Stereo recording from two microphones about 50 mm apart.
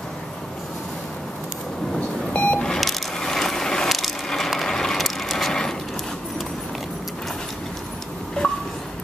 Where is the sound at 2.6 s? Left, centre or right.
Centre.